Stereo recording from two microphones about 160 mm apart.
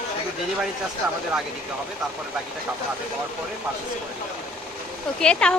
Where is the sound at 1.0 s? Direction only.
5° right (ahead or behind).